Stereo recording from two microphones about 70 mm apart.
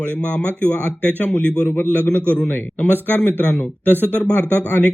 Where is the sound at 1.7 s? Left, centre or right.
Left.